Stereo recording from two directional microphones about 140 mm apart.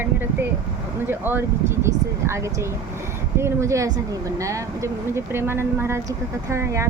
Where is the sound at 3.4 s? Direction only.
20° right (ahead or behind).